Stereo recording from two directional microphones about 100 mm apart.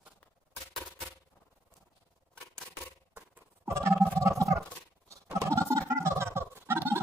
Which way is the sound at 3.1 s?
25° right (ahead or behind).